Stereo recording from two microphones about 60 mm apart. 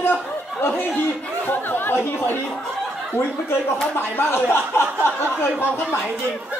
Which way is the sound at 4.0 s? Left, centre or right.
Left.